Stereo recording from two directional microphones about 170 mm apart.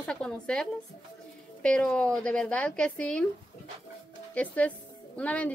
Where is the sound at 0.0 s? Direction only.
5° left (ahead or behind).